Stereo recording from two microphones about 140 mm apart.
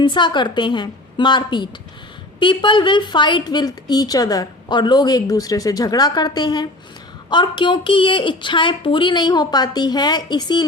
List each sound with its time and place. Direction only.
0.0 s a woman's voice: 35° left (ahead or behind)